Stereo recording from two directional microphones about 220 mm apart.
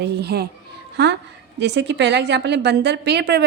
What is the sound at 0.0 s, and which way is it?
A woman's voice, 45° right (ahead or behind).